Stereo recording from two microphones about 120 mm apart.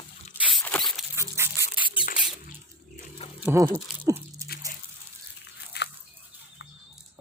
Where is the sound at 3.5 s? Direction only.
20° right (ahead or behind).